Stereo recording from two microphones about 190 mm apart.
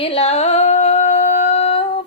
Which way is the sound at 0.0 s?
35° left (ahead or behind).